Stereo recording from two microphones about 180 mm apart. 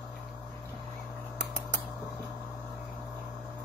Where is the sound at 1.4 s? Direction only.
70° right (ahead or behind).